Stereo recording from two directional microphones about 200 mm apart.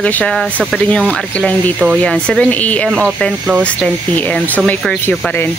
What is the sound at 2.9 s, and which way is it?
Speech, 5° right (ahead or behind).